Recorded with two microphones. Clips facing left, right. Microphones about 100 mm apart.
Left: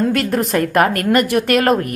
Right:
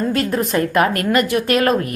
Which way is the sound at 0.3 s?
65° left (ahead or behind).